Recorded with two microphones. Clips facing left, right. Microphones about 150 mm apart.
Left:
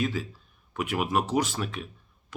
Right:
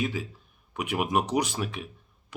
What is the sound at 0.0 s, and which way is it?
Speech, 15° right (ahead or behind).